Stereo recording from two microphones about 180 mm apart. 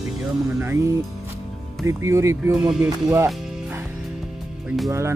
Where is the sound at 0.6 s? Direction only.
15° right (ahead or behind).